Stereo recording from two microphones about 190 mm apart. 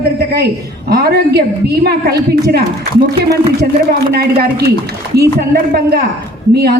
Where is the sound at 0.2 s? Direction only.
55° right (ahead or behind).